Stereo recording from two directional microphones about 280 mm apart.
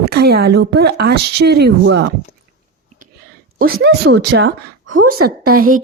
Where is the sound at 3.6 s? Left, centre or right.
Right.